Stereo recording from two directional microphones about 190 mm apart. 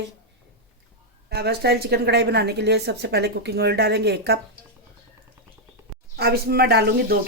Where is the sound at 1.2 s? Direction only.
60° right (ahead or behind).